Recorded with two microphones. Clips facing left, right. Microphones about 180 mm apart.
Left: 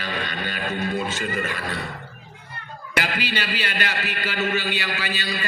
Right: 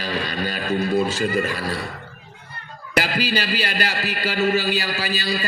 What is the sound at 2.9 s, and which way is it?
A man's voice, 35° right (ahead or behind).